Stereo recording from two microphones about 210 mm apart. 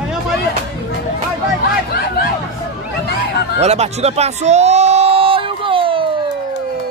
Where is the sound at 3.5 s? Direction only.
30° right (ahead or behind).